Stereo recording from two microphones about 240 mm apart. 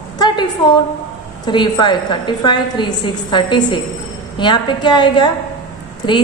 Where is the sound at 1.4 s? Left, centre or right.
Centre.